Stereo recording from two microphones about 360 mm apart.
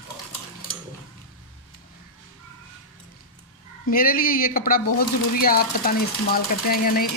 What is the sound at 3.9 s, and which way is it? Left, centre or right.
Speech, left.